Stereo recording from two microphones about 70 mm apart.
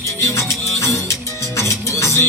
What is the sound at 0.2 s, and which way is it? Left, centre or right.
Music, left.